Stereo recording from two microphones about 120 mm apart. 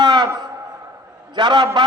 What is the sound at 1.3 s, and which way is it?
Speech, 35° right (ahead or behind).